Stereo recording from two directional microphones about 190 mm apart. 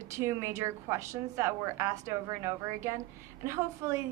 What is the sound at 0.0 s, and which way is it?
A woman's voice, 15° right (ahead or behind).